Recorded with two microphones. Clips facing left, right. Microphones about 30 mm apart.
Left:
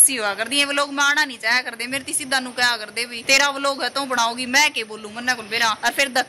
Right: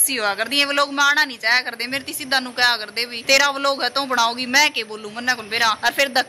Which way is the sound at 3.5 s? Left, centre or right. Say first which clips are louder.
Right 2 dB; right.